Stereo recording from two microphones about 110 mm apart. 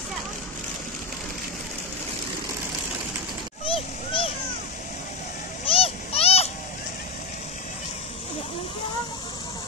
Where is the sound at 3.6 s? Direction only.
55° left (ahead or behind).